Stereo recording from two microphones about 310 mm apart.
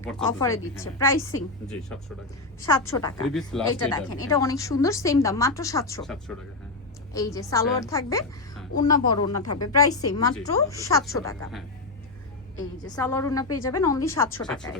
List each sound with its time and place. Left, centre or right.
0.0 s a woman's voice: centre
3.2 s a woman's voice: centre
12.8 s a woman's voice: centre